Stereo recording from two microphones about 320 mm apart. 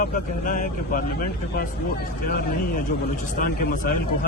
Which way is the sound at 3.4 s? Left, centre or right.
Left.